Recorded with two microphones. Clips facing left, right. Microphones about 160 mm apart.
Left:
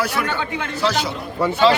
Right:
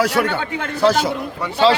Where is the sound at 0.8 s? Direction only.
50° right (ahead or behind).